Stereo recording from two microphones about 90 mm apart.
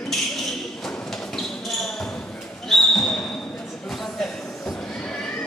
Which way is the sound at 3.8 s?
5° left (ahead or behind).